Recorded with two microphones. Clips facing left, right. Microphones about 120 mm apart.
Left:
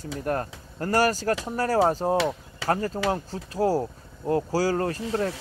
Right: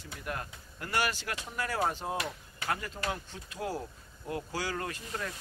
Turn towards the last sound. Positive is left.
turn(degrees=40)  # may be behind; listen again after turning